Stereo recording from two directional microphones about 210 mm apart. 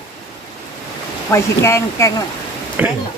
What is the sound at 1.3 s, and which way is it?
Speech, 15° left (ahead or behind).